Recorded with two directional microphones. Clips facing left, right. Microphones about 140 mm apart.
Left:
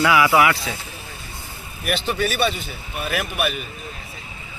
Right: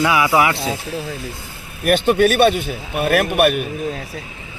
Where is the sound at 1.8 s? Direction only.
55° right (ahead or behind); by 4.2 s 85° right.